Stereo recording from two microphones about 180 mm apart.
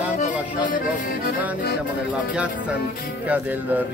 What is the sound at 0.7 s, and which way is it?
Music, 50° left (ahead or behind).